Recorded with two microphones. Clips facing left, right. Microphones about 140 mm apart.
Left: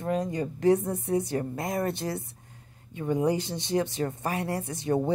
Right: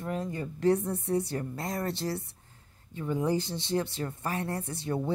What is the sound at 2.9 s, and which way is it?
A woman's voice, 15° left (ahead or behind).